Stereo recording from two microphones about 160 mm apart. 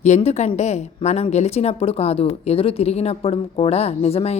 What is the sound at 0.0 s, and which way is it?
A woman's voice, 45° left (ahead or behind).